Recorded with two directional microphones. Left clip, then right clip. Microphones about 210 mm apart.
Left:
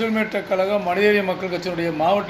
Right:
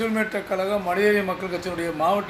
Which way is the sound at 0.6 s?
10° right (ahead or behind).